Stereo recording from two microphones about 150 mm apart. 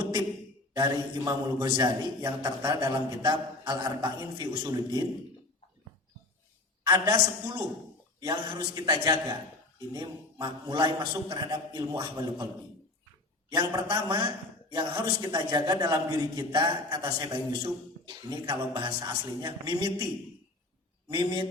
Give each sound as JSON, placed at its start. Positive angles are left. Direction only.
{"t": 0.8, "sound": "a man's voice", "side_deg": -25}
{"t": 6.8, "sound": "a man's voice", "side_deg": -25}
{"t": 13.5, "sound": "a man's voice", "side_deg": -25}
{"t": 21.1, "sound": "a man's voice", "side_deg": -30}